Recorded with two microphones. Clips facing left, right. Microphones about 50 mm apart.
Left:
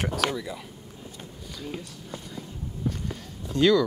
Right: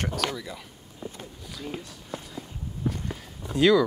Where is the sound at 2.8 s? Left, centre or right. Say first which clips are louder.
Right 1 dB; centre.